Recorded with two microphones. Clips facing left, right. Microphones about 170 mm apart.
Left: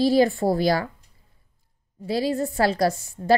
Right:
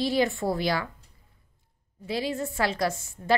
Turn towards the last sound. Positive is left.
turn(degrees=35)  # may be behind; listen again after turning